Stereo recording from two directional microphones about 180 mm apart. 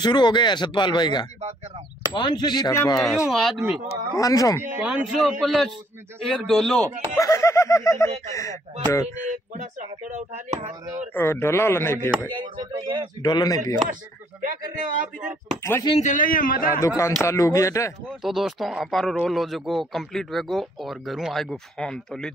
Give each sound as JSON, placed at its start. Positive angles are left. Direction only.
{"t": 0.0, "sound": "speech", "side_deg": 25}
{"t": 3.0, "sound": "speech", "side_deg": 0}
{"t": 4.2, "sound": "speech", "side_deg": 20}
{"t": 4.7, "sound": "speech", "side_deg": -5}
{"t": 7.2, "sound": "a sound", "side_deg": 15}
{"t": 9.1, "sound": "speech", "side_deg": -45}
{"t": 11.1, "sound": "a sound", "side_deg": 15}
{"t": 12.4, "sound": "speech", "side_deg": -25}
{"t": 13.2, "sound": "speech", "side_deg": 20}
{"t": 14.4, "sound": "speech", "side_deg": -50}
{"t": 15.6, "sound": "a sound", "side_deg": 15}
{"t": 16.0, "sound": "a man's voice", "side_deg": 45}
{"t": 16.8, "sound": "a sound", "side_deg": 15}
{"t": 18.2, "sound": "speech", "side_deg": 0}